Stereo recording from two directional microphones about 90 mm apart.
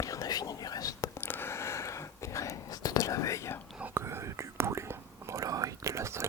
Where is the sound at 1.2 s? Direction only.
25° left (ahead or behind).